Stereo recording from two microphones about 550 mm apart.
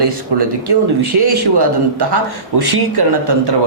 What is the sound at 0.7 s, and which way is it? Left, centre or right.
Speech, right.